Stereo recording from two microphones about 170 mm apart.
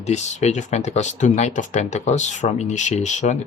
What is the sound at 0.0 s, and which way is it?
Speech, 40° left (ahead or behind).